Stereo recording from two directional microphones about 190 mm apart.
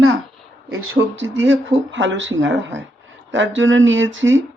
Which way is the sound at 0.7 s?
80° right.